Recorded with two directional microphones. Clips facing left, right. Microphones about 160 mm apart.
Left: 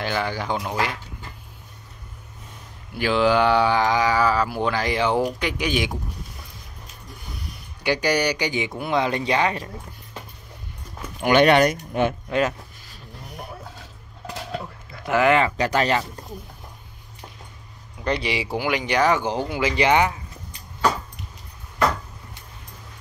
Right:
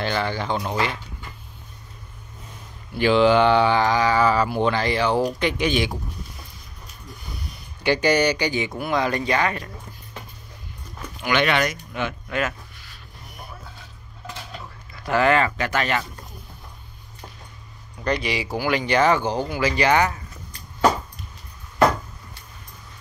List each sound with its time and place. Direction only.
0.0 s speech: 10° left (ahead or behind)
2.9 s speech: 5° left (ahead or behind)
7.8 s speech: 10° left (ahead or behind)
11.2 s speech: 45° left (ahead or behind)
12.3 s speech: 30° left (ahead or behind)
15.0 s speech: 15° left (ahead or behind)
15.5 s speech: 30° left (ahead or behind)
18.0 s speech: 25° left (ahead or behind)
18.7 s speech: 15° left (ahead or behind)